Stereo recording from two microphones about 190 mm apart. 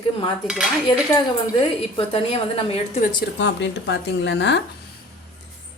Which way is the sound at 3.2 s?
65° left (ahead or behind).